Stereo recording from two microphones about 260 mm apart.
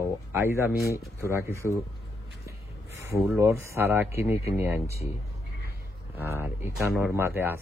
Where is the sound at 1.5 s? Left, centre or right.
Centre.